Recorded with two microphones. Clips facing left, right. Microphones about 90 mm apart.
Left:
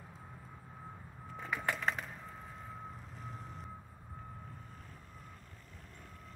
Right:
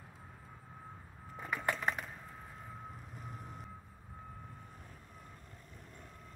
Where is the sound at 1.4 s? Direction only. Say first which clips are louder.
Even; centre (ahead or behind).